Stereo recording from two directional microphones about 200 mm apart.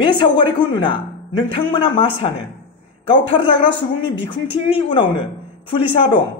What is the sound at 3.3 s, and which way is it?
A man's voice, 25° left (ahead or behind).